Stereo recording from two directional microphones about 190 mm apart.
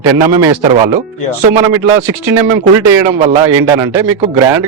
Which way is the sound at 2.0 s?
15° right (ahead or behind).